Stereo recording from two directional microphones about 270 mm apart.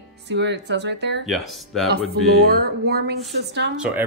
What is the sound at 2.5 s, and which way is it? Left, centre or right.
Speech, right.